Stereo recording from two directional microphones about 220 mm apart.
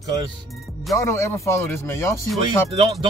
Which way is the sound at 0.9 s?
10° left (ahead or behind).